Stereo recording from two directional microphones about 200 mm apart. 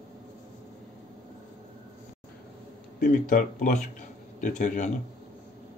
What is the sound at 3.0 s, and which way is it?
A man's voice, 45° left (ahead or behind).